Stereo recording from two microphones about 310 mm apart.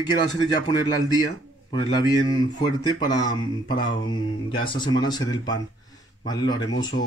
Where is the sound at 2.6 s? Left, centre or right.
Centre.